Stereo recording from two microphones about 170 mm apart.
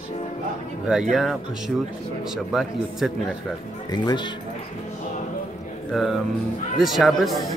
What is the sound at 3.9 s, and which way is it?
Speech, 25° left (ahead or behind).